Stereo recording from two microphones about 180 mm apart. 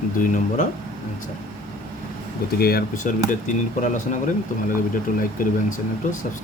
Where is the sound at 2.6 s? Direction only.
50° left (ahead or behind).